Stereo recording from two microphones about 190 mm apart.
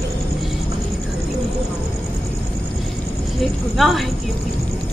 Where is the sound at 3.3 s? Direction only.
Centre (ahead or behind).